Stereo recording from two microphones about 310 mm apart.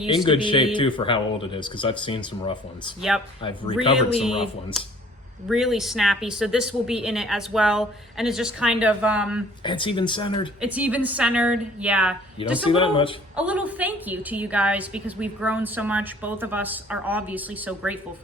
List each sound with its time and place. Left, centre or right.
0.0 s speech: centre
4.2 s a woman's voice: centre
9.6 s speech: centre
10.6 s a woman's voice: centre
12.6 s speech: centre
13.3 s a woman's voice: centre